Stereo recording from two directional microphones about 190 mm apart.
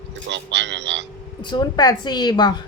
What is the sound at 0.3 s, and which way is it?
Music, 70° right (ahead or behind).